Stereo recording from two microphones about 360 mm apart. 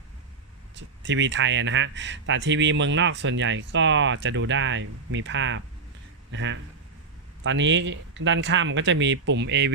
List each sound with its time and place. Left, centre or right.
0.8 s speech: right